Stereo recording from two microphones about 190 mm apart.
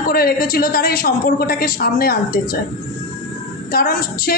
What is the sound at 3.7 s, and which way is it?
Speech, 50° left (ahead or behind).